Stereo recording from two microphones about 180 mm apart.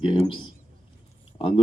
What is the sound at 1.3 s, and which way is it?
Speech, 30° left (ahead or behind).